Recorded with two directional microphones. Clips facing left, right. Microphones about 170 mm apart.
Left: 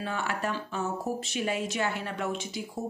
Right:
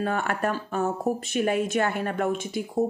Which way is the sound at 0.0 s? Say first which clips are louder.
Right 6 dB; 55° right (ahead or behind).